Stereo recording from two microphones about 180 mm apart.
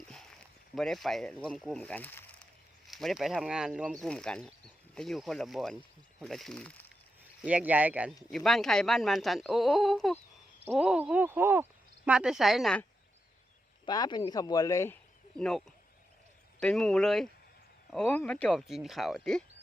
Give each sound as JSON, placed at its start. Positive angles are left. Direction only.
{"t": 0.1, "sound": "a sound", "side_deg": 5}
{"t": 0.8, "sound": "speech", "side_deg": 0}
{"t": 7.4, "sound": "speech", "side_deg": -10}
{"t": 13.8, "sound": "speech", "side_deg": 25}
{"t": 15.4, "sound": "speech", "side_deg": 5}